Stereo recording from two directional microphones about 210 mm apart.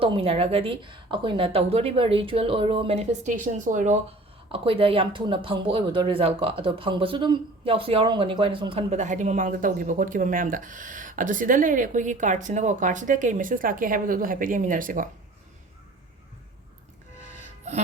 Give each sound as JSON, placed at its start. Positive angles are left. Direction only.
{"t": 0.0, "sound": "a woman's voice", "side_deg": -25}
{"t": 4.5, "sound": "speech", "side_deg": -25}
{"t": 17.4, "sound": "music", "side_deg": -30}